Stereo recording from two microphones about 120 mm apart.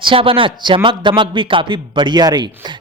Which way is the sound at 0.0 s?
45° right (ahead or behind).